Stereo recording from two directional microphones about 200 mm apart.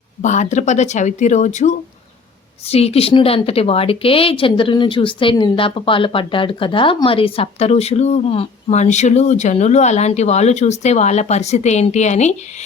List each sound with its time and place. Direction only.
0.2 s a woman's voice: 35° left (ahead or behind)